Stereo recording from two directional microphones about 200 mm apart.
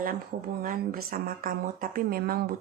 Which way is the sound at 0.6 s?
45° right (ahead or behind).